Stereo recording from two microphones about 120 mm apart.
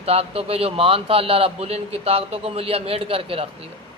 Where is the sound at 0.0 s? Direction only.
55° right (ahead or behind).